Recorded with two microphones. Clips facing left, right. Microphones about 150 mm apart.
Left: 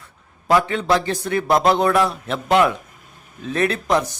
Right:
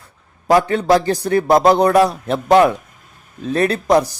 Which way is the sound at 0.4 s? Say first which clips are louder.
Right 4 dB; 40° right (ahead or behind).